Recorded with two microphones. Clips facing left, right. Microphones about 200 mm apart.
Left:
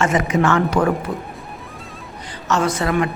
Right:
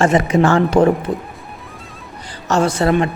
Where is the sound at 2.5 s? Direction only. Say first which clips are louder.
Right 4 dB; 30° right (ahead or behind).